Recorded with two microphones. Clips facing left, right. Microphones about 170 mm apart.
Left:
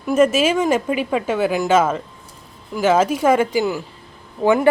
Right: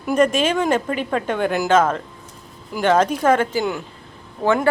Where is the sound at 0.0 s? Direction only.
5° left (ahead or behind).